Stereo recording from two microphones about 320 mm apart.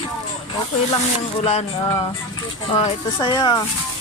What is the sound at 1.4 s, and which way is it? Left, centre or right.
Speech, centre.